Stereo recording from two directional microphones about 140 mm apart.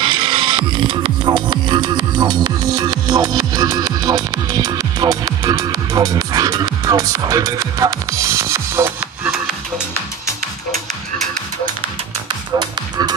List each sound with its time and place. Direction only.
0.0 s music: 35° right (ahead or behind); by 9.3 s 15° right (ahead or behind)
12.5 s music: 30° right (ahead or behind)